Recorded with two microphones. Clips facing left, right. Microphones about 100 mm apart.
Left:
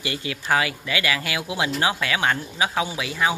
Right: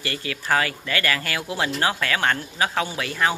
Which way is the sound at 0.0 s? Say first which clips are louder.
Even; 15° left (ahead or behind).